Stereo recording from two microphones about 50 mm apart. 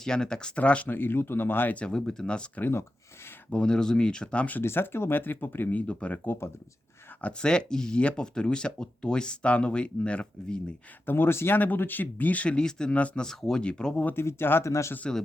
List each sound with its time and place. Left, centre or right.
0.0 s speech: centre
0.9 s speech: left
1.7 s speech: left
3.5 s speech: centre
4.6 s speech: left
5.7 s speech: left
7.2 s speech: left
11.0 s speech: left
11.5 s speech: left; by 14.0 s centre
14.2 s speech: left
14.6 s speech: left